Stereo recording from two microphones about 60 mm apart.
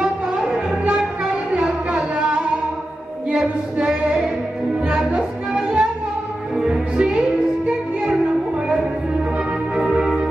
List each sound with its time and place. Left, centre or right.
0.0 s music: centre
1.9 s music: centre
9.9 s music: centre